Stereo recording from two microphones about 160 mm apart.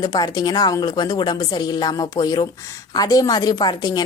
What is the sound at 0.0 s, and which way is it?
Speech, 25° left (ahead or behind).